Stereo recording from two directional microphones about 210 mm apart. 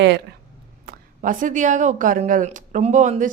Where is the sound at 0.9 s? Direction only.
40° right (ahead or behind).